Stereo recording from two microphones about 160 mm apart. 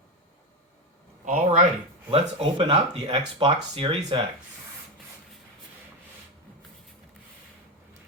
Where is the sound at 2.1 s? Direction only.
35° right (ahead or behind).